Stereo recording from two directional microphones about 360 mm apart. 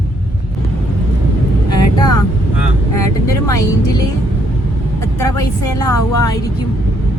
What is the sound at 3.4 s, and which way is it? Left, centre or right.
Speech, centre.